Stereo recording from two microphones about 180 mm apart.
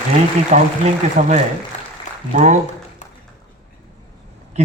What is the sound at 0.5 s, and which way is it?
Speech, 40° right (ahead or behind).